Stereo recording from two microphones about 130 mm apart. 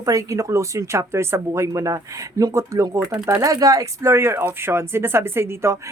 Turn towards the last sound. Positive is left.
turn(degrees=-20)  # may be behind; listen again after turning